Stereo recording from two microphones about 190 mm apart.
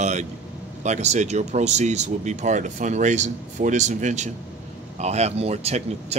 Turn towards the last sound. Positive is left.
turn(degrees=-35)  # may be behind; listen again after turning